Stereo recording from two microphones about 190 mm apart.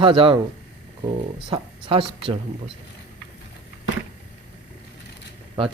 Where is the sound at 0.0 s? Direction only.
25° right (ahead or behind).